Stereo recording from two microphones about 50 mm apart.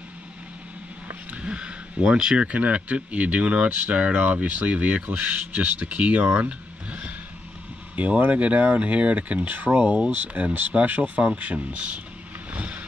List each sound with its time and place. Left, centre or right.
1.3 s speech: right
12.5 s vehicle: right